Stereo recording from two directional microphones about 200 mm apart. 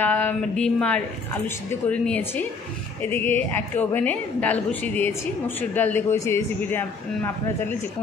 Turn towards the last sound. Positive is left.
turn(degrees=10)  # may be behind; listen again after turning